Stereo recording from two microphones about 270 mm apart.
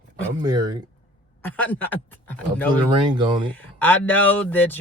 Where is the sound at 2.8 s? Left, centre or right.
Centre.